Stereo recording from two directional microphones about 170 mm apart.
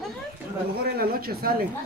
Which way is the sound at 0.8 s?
65° right (ahead or behind).